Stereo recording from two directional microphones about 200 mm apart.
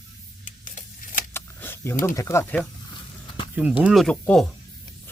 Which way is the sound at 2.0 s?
15° left (ahead or behind).